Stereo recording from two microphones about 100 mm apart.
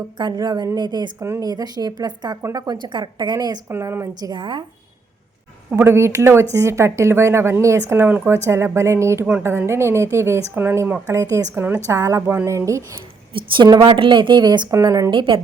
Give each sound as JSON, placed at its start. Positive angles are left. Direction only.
{"t": 0.2, "sound": "speech", "side_deg": -45}
{"t": 1.2, "sound": "speech", "side_deg": -25}
{"t": 1.5, "sound": "a woman's voice", "side_deg": -40}
{"t": 3.7, "sound": "a woman's voice", "side_deg": -25}
{"t": 5.7, "sound": "speech", "side_deg": -25}
{"t": 11.0, "sound": "a woman's voice", "side_deg": -30}
{"t": 13.8, "sound": "a woman's voice", "side_deg": -55}
{"t": 15.1, "sound": "a woman's voice", "side_deg": -60}